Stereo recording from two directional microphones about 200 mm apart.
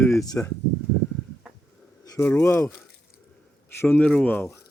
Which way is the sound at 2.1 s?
10° left (ahead or behind).